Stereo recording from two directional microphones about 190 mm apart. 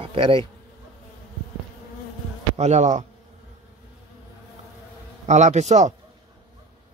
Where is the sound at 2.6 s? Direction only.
35° right (ahead or behind).